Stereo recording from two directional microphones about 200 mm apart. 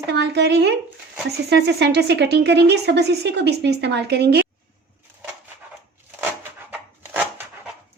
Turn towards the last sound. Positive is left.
turn(degrees=-10)  # may be behind; listen again after turning